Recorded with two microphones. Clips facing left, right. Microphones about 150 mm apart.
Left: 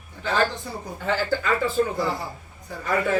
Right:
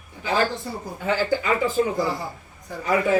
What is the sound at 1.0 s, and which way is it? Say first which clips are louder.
A man's voice: right 2 dB; 15° right (ahead or behind).